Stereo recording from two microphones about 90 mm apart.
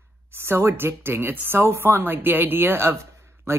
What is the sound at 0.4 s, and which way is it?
Speech, 30° right (ahead or behind).